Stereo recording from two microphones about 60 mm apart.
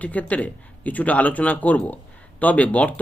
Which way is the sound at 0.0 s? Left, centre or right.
Left.